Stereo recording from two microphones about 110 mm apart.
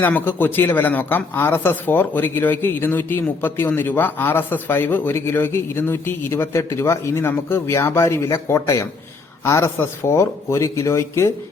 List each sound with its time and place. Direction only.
0.0 s speech: 20° left (ahead or behind)